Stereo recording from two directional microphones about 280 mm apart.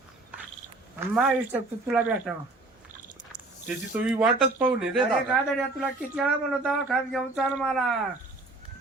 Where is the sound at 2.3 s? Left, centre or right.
Centre.